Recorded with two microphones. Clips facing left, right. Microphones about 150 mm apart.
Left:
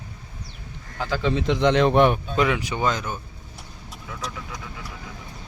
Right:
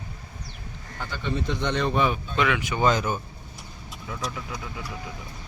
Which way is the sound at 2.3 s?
35° left (ahead or behind).